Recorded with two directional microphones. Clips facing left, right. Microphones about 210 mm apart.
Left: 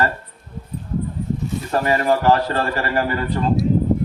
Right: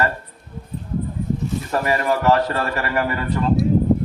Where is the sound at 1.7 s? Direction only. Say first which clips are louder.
Left 3 dB; 30° left (ahead or behind).